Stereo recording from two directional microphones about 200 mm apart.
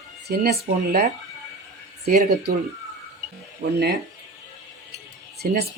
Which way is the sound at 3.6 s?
65° right (ahead or behind).